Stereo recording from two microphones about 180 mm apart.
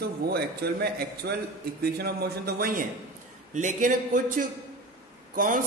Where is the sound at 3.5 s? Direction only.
40° right (ahead or behind).